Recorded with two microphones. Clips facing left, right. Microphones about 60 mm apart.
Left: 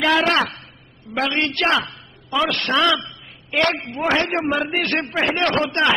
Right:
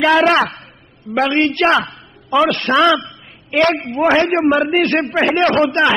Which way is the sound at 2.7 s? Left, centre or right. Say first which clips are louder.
Right 5 dB; right.